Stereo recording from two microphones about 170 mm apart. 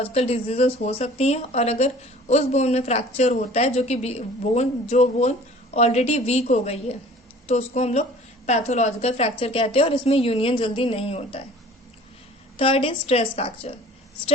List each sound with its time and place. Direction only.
0.1 s speech: 35° left (ahead or behind)
12.5 s speech: 35° left (ahead or behind)